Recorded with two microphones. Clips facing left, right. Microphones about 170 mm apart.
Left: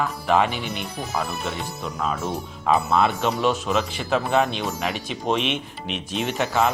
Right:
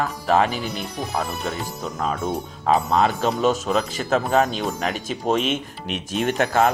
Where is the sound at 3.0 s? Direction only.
40° right (ahead or behind).